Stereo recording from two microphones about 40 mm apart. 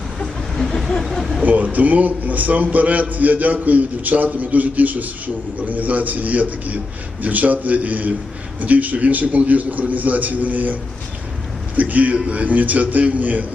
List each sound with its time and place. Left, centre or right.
0.5 s a sound: centre
1.0 s speech: centre
1.5 s a man's voice: right
11.8 s a man's voice: right